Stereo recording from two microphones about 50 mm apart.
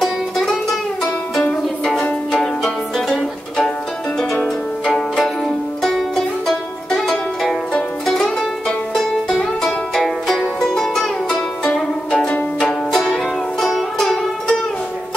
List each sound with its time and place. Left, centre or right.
0.0 s music: centre